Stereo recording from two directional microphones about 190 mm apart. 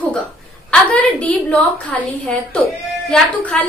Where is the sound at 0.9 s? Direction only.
5° left (ahead or behind).